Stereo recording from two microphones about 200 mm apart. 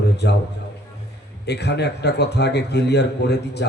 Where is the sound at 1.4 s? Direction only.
55° left (ahead or behind).